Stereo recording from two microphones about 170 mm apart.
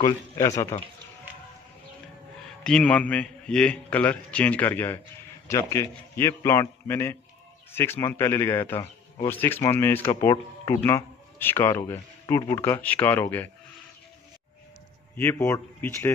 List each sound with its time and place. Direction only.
0.0 s speech: 20° left (ahead or behind)
2.6 s a man's voice: 5° left (ahead or behind)
15.1 s a man's voice: 15° left (ahead or behind)